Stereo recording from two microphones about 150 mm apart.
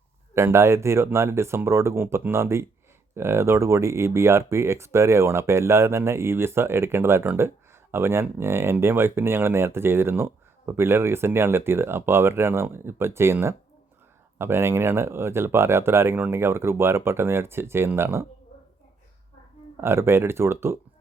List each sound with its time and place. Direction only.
0.3 s speech: 15° right (ahead or behind)
19.7 s speech: 15° right (ahead or behind)